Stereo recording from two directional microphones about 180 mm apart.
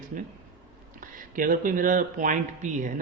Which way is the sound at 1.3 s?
50° right (ahead or behind).